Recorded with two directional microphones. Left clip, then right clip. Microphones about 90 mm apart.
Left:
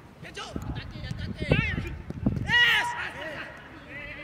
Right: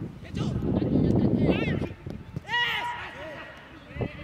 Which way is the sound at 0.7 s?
20° left (ahead or behind).